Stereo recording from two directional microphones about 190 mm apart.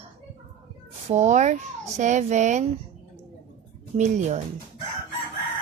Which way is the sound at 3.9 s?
40° right (ahead or behind).